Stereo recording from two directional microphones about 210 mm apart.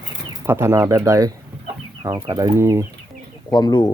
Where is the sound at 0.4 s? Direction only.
10° right (ahead or behind).